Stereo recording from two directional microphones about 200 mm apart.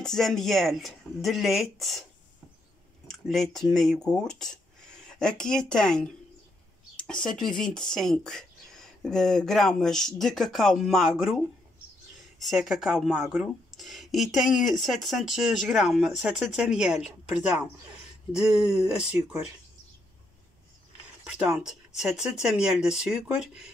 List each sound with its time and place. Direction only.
0.0 s speech: centre (ahead or behind)
3.1 s speech: centre (ahead or behind)
21.3 s speech: 5° right (ahead or behind)